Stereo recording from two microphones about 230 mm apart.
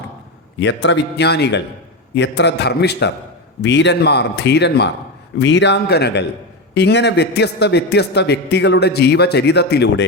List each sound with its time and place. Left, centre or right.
0.6 s a man's voice: left